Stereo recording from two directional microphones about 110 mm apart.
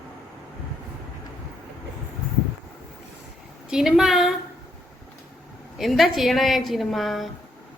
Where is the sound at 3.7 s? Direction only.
5° right (ahead or behind).